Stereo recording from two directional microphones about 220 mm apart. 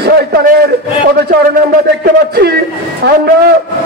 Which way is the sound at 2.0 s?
45° right (ahead or behind).